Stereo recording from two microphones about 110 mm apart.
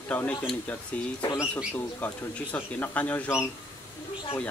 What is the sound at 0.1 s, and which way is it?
Speech, 15° left (ahead or behind).